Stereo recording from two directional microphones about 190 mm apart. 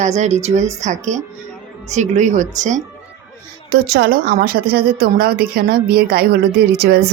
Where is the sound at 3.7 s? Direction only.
55° right (ahead or behind).